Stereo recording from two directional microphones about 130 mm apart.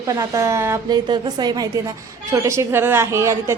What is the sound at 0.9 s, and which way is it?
Speech, 35° right (ahead or behind).